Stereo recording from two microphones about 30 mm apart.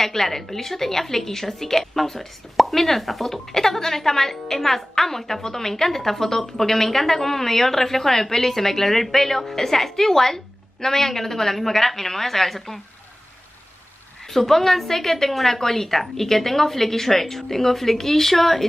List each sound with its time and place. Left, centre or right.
0.0 s a woman's voice: centre
14.3 s a woman's voice: centre